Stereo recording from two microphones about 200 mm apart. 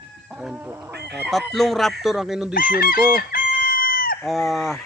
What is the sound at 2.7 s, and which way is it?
Chicken, 45° left (ahead or behind).